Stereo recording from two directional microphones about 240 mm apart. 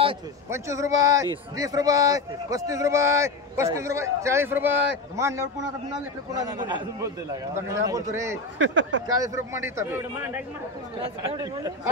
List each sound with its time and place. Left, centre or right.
0.5 s a man's voice: centre
8.5 s speech: right
9.0 s a man's voice: centre